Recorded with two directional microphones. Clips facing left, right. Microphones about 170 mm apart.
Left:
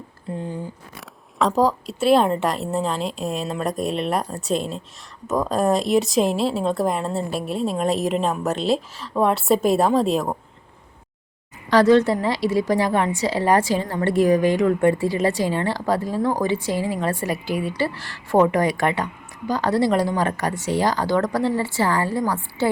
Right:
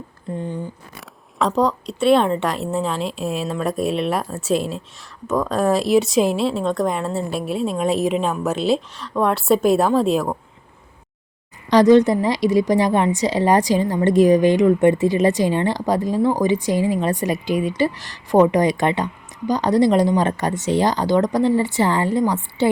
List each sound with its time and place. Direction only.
0.3 s a woman's voice: 5° left (ahead or behind)
11.7 s a woman's voice: 20° right (ahead or behind)